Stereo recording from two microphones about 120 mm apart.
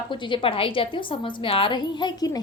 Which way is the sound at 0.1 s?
40° left (ahead or behind).